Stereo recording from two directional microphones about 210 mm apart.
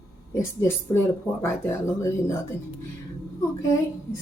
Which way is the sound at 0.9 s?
15° left (ahead or behind).